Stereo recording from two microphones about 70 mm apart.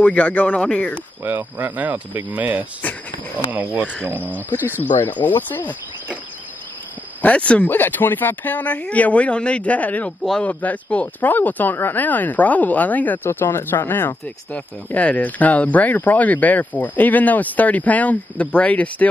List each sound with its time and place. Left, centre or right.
0.0 s speech: left
1.2 s speech: right
4.8 s speech: left
7.2 s speech: centre
13.3 s speech: left